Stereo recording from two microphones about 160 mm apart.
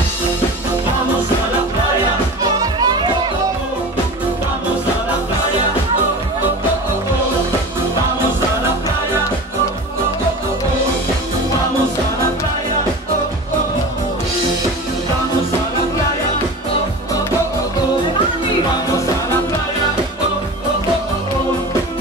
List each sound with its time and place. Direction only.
2.4 s music: 25° right (ahead or behind)